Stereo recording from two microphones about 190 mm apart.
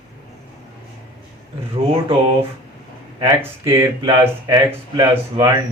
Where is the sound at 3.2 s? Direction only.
15° right (ahead or behind).